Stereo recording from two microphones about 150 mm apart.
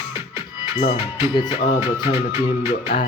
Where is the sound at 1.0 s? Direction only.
30° left (ahead or behind).